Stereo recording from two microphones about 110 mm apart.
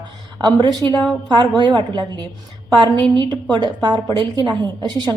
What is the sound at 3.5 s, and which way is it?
A woman's voice, 40° right (ahead or behind).